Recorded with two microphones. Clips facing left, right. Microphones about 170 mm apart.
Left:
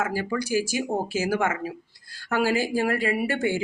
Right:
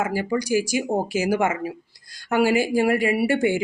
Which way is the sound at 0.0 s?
15° right (ahead or behind).